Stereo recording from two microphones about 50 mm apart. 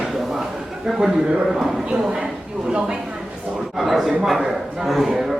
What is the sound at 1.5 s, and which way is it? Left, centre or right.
Speech, centre.